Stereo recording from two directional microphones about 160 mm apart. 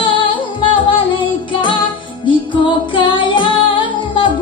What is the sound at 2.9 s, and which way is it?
Music, 30° left (ahead or behind).